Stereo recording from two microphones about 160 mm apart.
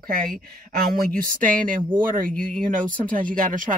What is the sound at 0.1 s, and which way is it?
Speech, 65° right (ahead or behind).